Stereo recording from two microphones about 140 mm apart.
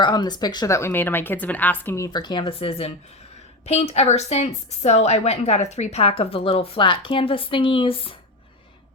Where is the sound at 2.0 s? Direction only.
30° left (ahead or behind).